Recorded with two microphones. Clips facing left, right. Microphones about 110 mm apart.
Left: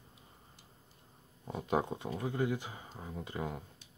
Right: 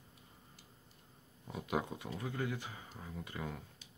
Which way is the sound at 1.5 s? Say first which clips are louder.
Left 5 dB; 30° left (ahead or behind).